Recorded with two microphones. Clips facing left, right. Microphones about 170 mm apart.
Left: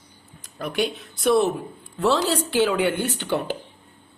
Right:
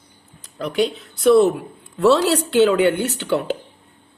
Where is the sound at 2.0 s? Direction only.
70° right (ahead or behind).